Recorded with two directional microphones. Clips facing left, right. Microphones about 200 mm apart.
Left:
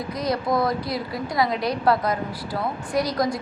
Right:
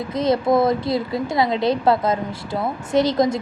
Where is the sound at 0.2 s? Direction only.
25° right (ahead or behind).